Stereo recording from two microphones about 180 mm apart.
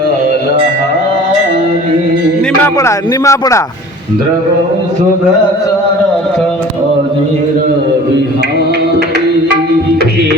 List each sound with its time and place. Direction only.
2.7 s speech: 15° left (ahead or behind)